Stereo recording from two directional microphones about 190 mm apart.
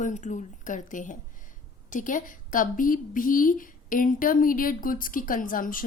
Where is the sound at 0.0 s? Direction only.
40° left (ahead or behind).